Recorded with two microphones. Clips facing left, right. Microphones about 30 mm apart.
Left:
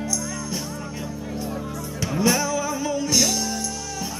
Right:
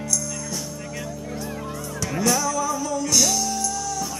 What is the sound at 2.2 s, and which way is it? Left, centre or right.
Music, left.